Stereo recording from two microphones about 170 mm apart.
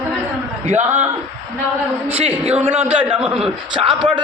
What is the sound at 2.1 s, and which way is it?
Speech, 40° right (ahead or behind).